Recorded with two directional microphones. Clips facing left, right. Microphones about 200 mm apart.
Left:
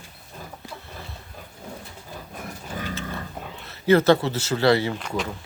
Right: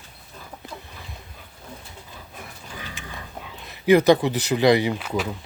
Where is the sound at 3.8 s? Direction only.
15° right (ahead or behind).